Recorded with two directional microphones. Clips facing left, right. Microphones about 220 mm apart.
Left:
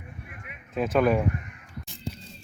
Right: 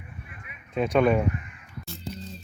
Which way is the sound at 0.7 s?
Centre (ahead or behind).